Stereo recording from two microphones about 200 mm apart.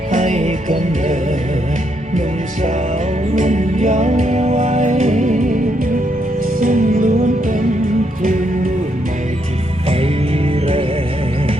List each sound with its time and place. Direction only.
0.1 s music: 35° right (ahead or behind)
2.1 s music: 40° right (ahead or behind)